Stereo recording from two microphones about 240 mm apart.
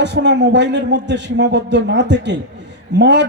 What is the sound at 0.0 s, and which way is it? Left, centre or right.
A man's voice, right.